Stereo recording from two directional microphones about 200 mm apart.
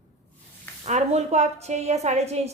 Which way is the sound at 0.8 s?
35° right (ahead or behind).